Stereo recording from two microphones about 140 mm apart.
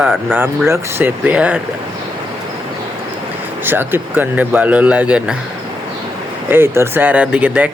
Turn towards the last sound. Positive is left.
turn(degrees=-10)  # may be behind; listen again after turning